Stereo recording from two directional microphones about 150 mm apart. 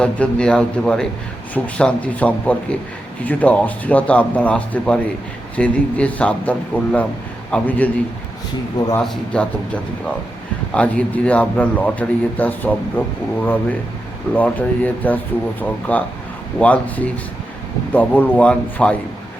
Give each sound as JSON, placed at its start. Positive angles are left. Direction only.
{"t": 0.0, "sound": "speech", "side_deg": 5}
{"t": 9.0, "sound": "speech", "side_deg": 10}
{"t": 10.7, "sound": "speech", "side_deg": 10}